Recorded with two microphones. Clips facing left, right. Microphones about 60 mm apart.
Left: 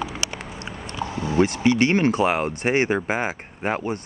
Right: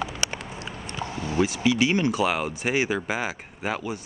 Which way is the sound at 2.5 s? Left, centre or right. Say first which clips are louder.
Left 4 dB; left.